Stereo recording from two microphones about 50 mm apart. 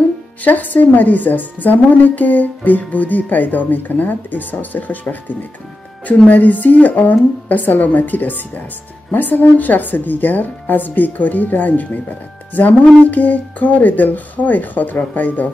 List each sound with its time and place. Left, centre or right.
0.4 s a woman's voice: left
6.0 s a woman's voice: left